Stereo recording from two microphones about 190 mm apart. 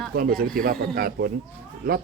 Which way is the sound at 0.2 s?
50° right (ahead or behind).